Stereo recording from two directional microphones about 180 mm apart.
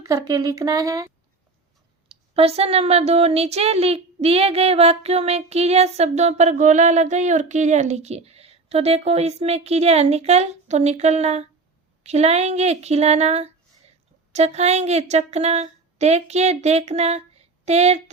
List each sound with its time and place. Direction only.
0.0 s speech: 20° right (ahead or behind)
2.0 s speech: 35° right (ahead or behind)